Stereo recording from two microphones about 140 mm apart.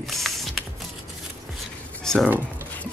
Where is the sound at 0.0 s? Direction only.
Centre (ahead or behind).